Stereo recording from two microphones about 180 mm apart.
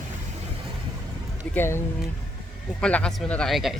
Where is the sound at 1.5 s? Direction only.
15° left (ahead or behind).